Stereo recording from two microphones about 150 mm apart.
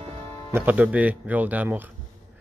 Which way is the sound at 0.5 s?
10° right (ahead or behind).